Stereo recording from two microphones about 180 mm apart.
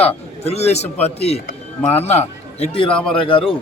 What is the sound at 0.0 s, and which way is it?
A man's voice, 35° left (ahead or behind).